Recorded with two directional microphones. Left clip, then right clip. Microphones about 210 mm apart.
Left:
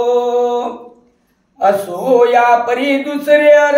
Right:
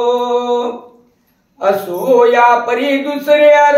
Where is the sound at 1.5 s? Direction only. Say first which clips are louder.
Left 1 dB; 15° left (ahead or behind).